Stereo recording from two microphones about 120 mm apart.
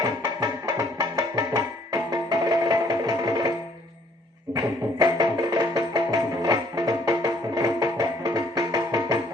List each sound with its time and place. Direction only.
0.0 s music: 30° right (ahead or behind)
4.5 s music: 30° right (ahead or behind)